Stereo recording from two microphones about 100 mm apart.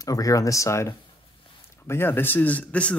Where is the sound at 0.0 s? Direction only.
35° left (ahead or behind).